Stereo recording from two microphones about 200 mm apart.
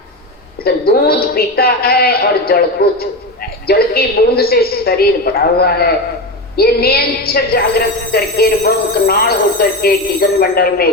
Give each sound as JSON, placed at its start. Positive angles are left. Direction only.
{"t": 0.6, "sound": "a woman's voice", "side_deg": 50}